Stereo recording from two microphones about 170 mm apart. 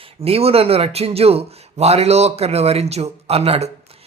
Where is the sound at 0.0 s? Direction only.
35° right (ahead or behind).